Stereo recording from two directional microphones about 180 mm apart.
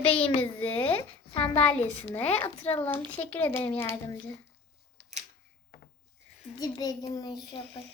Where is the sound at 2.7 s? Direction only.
10° left (ahead or behind).